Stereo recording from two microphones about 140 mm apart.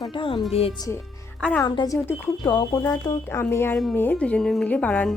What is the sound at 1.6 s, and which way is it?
A woman's voice, 25° left (ahead or behind).